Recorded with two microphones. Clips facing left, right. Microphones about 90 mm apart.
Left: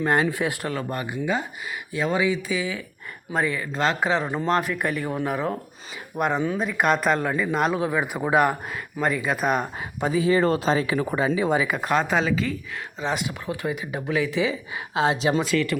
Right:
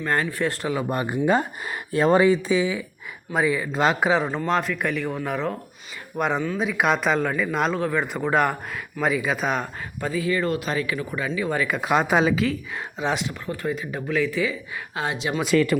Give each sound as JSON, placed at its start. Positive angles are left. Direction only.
{"t": 0.0, "sound": "speech", "side_deg": 20}
{"t": 0.7, "sound": "speech", "side_deg": -15}
{"t": 1.0, "sound": "speech", "side_deg": -50}
{"t": 2.6, "sound": "speech", "side_deg": -20}
{"t": 4.4, "sound": "speech", "side_deg": 5}
{"t": 10.0, "sound": "speech", "side_deg": 20}
{"t": 11.6, "sound": "speech", "side_deg": 5}
{"t": 11.9, "sound": "speech", "side_deg": -10}
{"t": 13.6, "sound": "speech", "side_deg": 15}
{"t": 14.9, "sound": "speech", "side_deg": 30}